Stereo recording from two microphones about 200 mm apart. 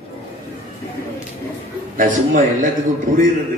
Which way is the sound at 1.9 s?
40° right (ahead or behind).